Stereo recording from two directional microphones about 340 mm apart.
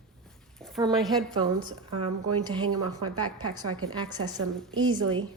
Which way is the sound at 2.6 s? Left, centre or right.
Right.